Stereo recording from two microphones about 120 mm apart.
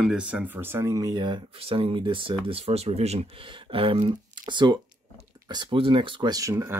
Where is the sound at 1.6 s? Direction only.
50° right (ahead or behind).